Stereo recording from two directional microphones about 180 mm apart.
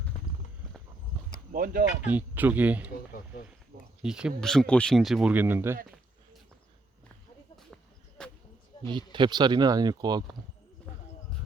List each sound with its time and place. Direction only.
1.5 s speech: 50° right (ahead or behind)
2.0 s speech: 10° right (ahead or behind)
4.0 s speech: 5° right (ahead or behind)
8.2 s a sound: 5° left (ahead or behind)
8.9 s speech: 25° right (ahead or behind)